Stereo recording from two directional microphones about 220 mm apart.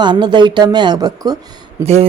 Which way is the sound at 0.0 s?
20° right (ahead or behind).